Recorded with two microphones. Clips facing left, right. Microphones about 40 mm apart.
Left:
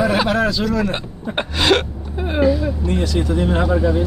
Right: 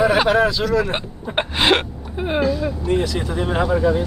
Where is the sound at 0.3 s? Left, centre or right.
Centre.